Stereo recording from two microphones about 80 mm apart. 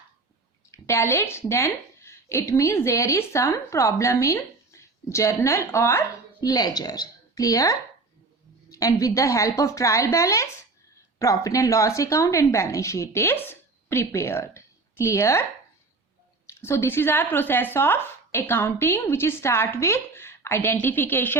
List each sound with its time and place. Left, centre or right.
0.7 s a woman's voice: left
6.4 s a woman's voice: left
16.5 s speech: left